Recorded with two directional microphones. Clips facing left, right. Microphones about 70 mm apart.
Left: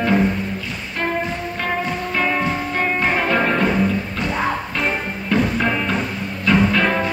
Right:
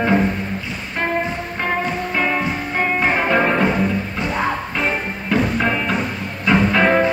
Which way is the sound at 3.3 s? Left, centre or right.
Centre.